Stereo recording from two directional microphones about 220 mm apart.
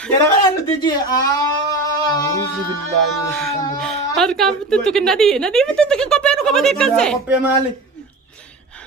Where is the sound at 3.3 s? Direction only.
Centre (ahead or behind).